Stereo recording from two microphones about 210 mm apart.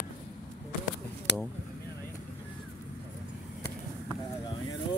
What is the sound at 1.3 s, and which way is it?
Speech, 55° left (ahead or behind).